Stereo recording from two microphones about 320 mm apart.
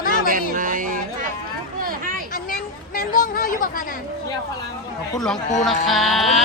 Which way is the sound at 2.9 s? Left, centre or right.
Left.